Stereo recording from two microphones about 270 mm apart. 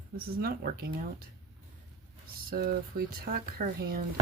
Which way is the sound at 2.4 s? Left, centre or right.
Right.